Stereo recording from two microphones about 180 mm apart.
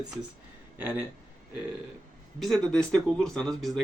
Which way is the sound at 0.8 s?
10° right (ahead or behind).